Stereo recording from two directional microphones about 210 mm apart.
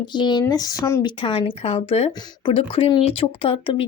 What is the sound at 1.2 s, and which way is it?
Speech, 25° left (ahead or behind).